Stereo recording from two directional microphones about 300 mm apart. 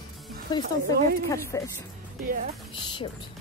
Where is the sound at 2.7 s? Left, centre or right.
Centre.